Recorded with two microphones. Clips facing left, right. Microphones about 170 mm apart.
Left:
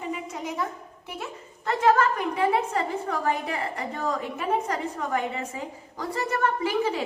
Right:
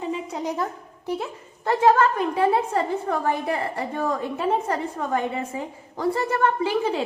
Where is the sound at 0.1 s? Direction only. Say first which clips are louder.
Right 3 dB; 35° right (ahead or behind).